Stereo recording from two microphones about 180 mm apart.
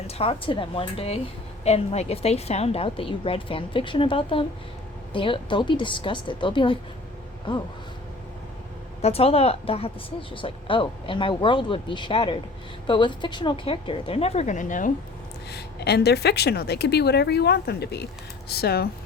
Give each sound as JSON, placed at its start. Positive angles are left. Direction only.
{"t": 0.1, "sound": "a woman's voice", "side_deg": 30}
{"t": 9.0, "sound": "a woman's voice", "side_deg": 35}
{"t": 15.4, "sound": "a woman's voice", "side_deg": 65}